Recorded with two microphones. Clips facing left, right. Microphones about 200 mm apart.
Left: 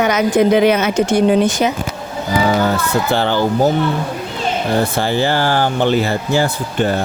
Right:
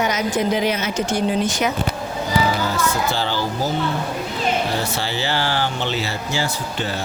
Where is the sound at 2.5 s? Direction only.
60° left (ahead or behind).